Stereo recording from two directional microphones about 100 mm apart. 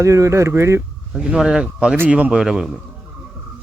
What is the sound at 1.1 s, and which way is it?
Speech, 10° right (ahead or behind).